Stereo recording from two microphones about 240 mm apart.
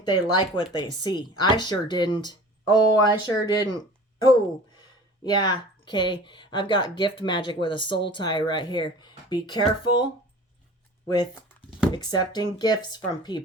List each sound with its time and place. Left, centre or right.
0.1 s a woman's voice: centre
11.9 s speech: centre